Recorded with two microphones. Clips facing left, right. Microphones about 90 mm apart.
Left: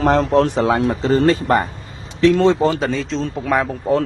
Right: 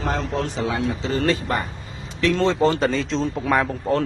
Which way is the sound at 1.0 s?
40° left (ahead or behind).